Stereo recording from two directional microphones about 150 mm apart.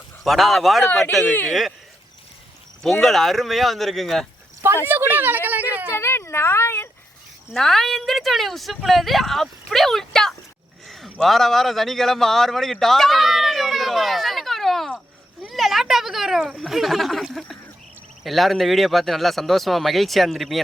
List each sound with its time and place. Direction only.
0.3 s a woman's voice: centre (ahead or behind)
0.9 s speech: 10° left (ahead or behind)
2.8 s a woman's voice: centre (ahead or behind)
4.9 s speech: 10° right (ahead or behind)
5.5 s a sound: 10° right (ahead or behind)
5.9 s a sound: 15° left (ahead or behind)
7.5 s a woman's voice: centre (ahead or behind)
10.8 s a sound: centre (ahead or behind)
15.4 s a woman's voice: centre (ahead or behind)